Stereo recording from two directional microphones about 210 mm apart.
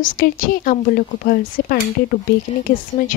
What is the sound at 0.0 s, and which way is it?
A woman's voice, 40° left (ahead or behind).